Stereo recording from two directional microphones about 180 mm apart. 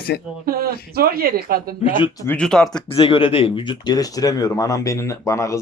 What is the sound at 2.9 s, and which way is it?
Speech, 30° left (ahead or behind).